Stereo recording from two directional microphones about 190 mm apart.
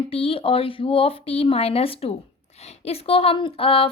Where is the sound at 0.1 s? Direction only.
30° left (ahead or behind).